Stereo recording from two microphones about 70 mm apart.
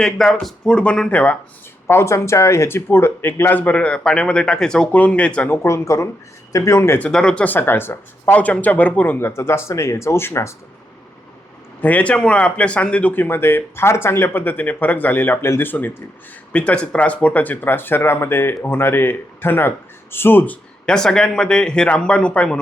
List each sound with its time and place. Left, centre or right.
0.0 s speech: centre
0.6 s speech: centre
1.9 s speech: left; by 4.9 s centre
4.9 s speech: left
5.5 s speech: left
7.1 s speech: centre
7.4 s speech: left
8.3 s speech: left
11.8 s speech: left
16.5 s speech: centre
20.8 s speech: centre